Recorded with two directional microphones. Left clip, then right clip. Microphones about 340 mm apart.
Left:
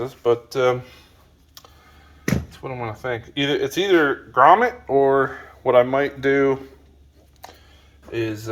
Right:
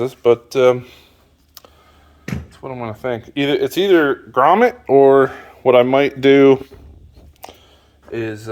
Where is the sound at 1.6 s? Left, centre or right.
Right.